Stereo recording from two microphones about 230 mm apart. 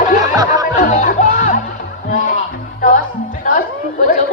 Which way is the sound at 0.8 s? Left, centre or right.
Left.